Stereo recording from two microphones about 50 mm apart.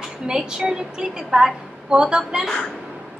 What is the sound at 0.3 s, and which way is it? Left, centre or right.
A woman's voice, centre.